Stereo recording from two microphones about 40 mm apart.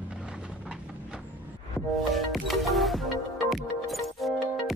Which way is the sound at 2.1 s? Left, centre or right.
Centre.